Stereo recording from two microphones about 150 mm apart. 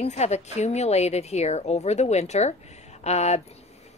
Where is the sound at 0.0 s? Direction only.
50° left (ahead or behind).